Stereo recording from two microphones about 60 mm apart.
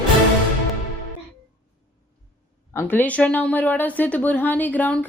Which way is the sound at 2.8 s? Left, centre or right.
Left.